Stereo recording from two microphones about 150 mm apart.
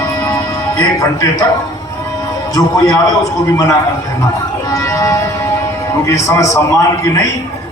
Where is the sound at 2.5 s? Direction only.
25° left (ahead or behind).